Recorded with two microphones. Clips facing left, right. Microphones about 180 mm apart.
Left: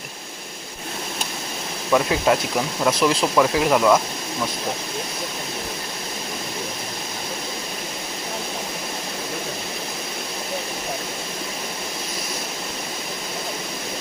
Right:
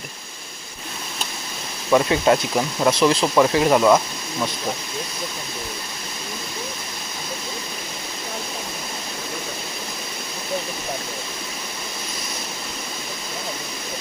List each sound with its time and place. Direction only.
1.9 s speech: centre (ahead or behind)